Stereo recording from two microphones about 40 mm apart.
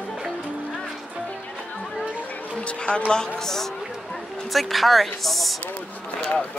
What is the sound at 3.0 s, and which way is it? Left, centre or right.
Speech, centre.